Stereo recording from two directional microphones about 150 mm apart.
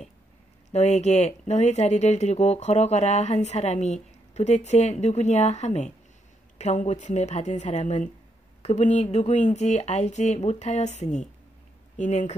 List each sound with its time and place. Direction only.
0.7 s speech: 50° left (ahead or behind)